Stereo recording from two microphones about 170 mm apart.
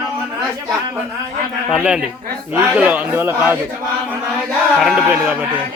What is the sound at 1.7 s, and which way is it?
A man's voice, 5° right (ahead or behind).